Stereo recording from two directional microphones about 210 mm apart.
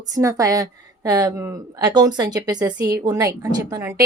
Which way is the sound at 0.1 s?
15° right (ahead or behind).